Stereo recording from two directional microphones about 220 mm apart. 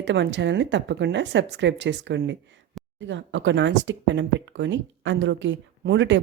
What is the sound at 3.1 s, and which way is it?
Speech, 55° right (ahead or behind).